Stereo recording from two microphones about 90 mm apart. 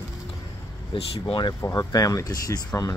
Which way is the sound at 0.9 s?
85° left.